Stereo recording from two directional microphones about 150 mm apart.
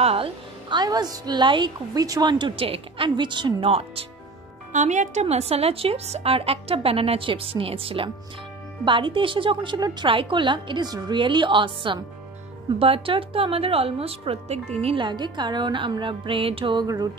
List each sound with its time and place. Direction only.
0.0 s a woman's voice: 40° right (ahead or behind)
4.7 s a woman's voice: 55° right (ahead or behind); by 17.1 s 25° right (ahead or behind)